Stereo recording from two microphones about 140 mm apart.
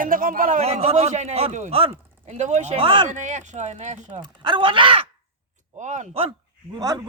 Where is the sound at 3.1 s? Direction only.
55° right (ahead or behind).